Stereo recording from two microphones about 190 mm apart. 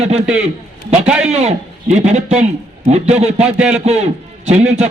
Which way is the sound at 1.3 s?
35° right (ahead or behind).